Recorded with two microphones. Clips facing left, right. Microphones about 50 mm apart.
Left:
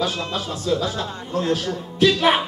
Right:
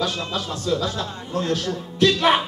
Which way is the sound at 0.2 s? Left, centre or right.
Centre.